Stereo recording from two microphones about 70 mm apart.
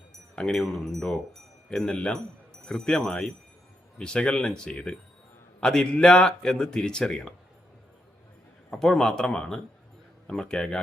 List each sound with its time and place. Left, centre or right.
0.3 s a man's voice: centre
8.7 s a man's voice: centre